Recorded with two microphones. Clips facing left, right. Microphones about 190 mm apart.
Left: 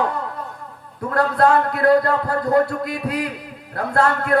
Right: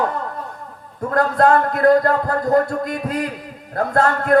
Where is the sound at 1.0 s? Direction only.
45° right (ahead or behind).